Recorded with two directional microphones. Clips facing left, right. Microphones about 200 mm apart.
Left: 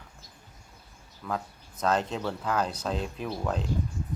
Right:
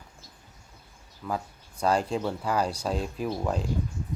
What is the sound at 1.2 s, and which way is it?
Speech, 10° right (ahead or behind).